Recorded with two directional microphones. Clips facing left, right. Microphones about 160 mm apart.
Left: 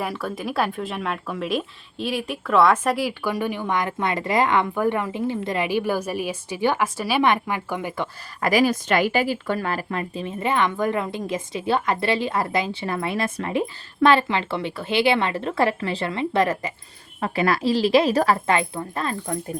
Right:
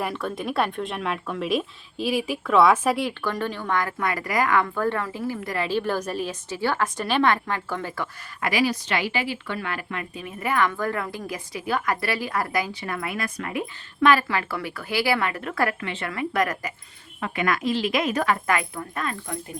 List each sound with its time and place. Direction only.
0.0 s speech: centre (ahead or behind)
7.2 s speech: 15° left (ahead or behind)
8.4 s a woman's voice: 45° left (ahead or behind)